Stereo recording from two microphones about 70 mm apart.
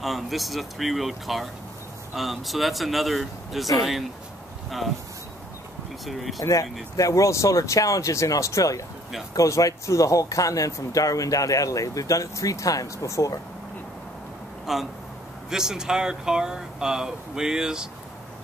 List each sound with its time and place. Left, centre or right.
0.0 s speech: centre
4.6 s speech: centre
6.0 s speech: centre
6.4 s speech: left
14.7 s speech: centre